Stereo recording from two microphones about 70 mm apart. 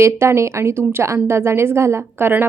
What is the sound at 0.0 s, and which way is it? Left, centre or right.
A woman's voice, right.